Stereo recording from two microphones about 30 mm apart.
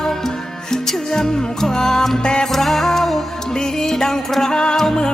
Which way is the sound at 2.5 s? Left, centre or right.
Centre.